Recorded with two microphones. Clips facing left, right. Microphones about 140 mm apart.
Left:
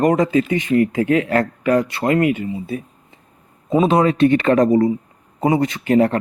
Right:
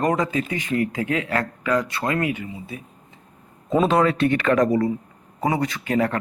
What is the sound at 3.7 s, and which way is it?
A man's voice, 15° left (ahead or behind).